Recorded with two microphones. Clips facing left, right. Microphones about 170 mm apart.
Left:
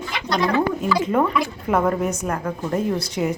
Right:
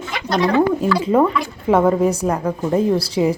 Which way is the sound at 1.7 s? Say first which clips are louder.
Right 7 dB; 25° right (ahead or behind).